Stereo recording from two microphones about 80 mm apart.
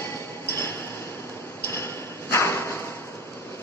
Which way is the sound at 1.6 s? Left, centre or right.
Left.